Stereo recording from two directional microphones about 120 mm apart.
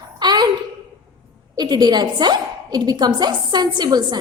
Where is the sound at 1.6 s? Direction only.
35° right (ahead or behind).